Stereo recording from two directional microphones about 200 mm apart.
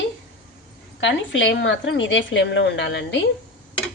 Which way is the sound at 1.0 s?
70° left (ahead or behind).